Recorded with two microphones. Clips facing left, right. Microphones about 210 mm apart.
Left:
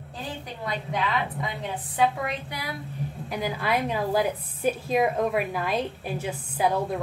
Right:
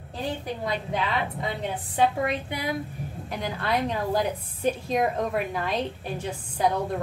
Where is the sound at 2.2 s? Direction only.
20° right (ahead or behind).